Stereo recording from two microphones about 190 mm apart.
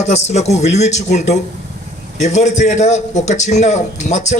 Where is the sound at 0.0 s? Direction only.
35° left (ahead or behind).